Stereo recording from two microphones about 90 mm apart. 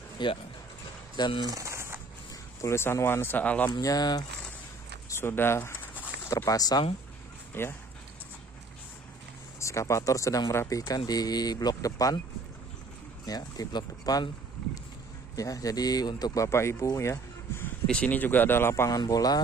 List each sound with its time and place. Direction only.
0.2 s speech: 60° left (ahead or behind)
1.5 s a sound: 35° right (ahead or behind)
2.6 s speech: 30° left (ahead or behind)
3.7 s speech: 45° left (ahead or behind)
5.1 s speech: 25° left (ahead or behind); by 6.8 s 45° left (ahead or behind)
7.6 s speech: 25° left (ahead or behind)
9.6 s speech: 35° left (ahead or behind)
11.1 s speech: 45° left (ahead or behind)
13.2 s speech: 45° left (ahead or behind)
15.3 s speech: 40° left (ahead or behind)
16.4 s speech: 30° left (ahead or behind)
16.8 s a sound: 35° left (ahead or behind)
17.8 s speech: 10° left (ahead or behind); by 18.9 s 30° left (ahead or behind)
18.9 s speech: 40° left (ahead or behind)